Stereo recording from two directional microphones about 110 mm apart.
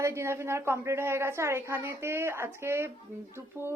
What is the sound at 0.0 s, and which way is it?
A woman's voice, 25° right (ahead or behind).